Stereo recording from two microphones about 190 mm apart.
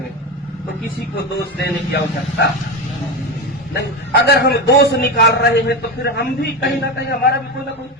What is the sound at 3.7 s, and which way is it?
A man's voice, 60° left (ahead or behind).